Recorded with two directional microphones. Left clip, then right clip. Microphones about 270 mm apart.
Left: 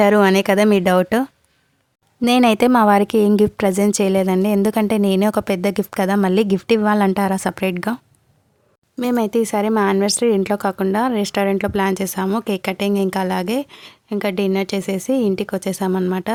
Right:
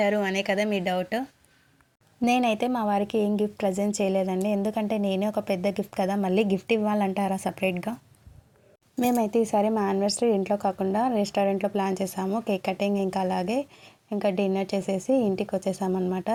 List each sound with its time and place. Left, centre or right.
0.0 s speech: left
2.2 s a woman's voice: left
9.0 s speech: centre